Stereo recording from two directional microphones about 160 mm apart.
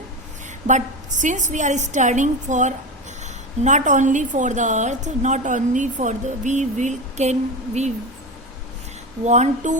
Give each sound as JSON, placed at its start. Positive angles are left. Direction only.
{"t": 0.7, "sound": "a woman's voice", "side_deg": -50}
{"t": 9.2, "sound": "a woman's voice", "side_deg": -45}